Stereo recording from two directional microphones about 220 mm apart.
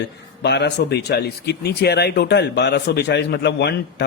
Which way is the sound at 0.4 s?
50° left (ahead or behind).